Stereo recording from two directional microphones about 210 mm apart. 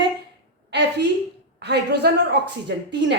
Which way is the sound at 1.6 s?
50° right (ahead or behind).